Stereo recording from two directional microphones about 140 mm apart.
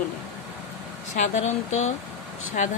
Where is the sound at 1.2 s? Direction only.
55° left (ahead or behind).